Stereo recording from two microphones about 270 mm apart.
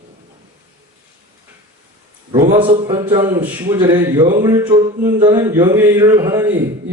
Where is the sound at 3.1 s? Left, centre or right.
Centre.